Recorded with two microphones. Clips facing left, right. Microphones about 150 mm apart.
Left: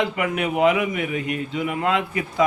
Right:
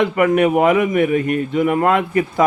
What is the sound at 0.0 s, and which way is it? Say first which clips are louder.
A man's voice: right 9 dB; 50° right (ahead or behind).